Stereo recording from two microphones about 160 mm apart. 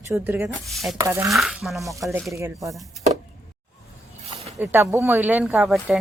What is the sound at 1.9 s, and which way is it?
Speech, 20° right (ahead or behind).